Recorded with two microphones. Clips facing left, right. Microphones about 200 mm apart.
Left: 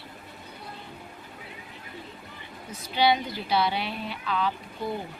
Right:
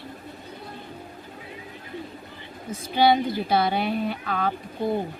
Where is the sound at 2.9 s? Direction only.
50° right (ahead or behind).